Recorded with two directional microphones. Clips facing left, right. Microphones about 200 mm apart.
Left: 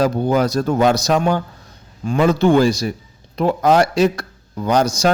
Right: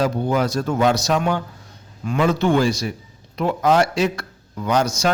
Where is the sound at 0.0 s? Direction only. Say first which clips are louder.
Left 3 dB; 40° left (ahead or behind).